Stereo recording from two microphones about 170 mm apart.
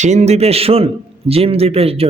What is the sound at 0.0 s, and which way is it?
A man's voice, 45° right (ahead or behind).